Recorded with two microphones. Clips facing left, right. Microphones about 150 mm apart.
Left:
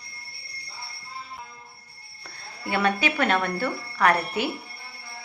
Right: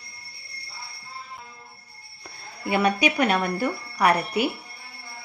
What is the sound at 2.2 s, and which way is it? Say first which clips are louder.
Speech: right 2 dB; 15° right (ahead or behind).